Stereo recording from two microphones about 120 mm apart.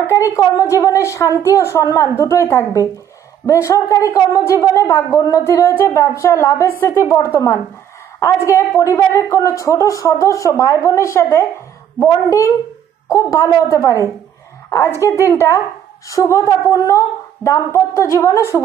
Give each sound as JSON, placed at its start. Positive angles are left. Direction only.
{"t": 0.0, "sound": "a woman's voice", "side_deg": 25}